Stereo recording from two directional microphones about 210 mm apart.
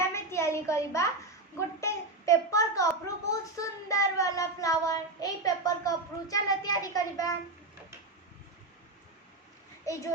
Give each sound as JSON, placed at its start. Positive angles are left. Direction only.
{"t": 0.0, "sound": "a sound", "side_deg": 15}
{"t": 1.5, "sound": "a child's voice", "side_deg": 15}
{"t": 9.8, "sound": "a child's voice", "side_deg": 15}